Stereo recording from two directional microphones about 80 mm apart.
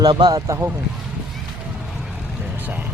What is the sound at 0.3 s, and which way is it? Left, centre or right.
Speech, right.